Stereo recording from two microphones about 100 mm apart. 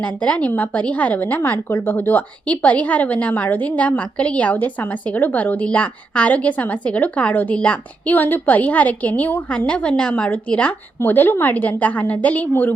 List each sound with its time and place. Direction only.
0.0 s a woman's voice: 15° left (ahead or behind)